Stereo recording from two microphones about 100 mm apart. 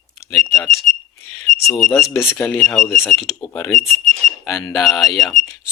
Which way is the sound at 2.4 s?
15° left (ahead or behind).